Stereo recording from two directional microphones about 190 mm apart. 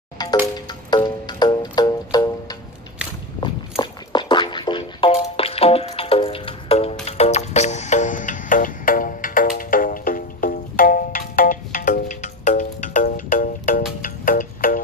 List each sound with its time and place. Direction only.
0.2 s wind chime: 20° left (ahead or behind)
0.6 s music: 20° left (ahead or behind)
3.7 s music: 25° left (ahead or behind); by 14.8 s 45° left (ahead or behind)